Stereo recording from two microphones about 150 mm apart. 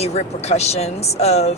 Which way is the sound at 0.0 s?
45° left (ahead or behind).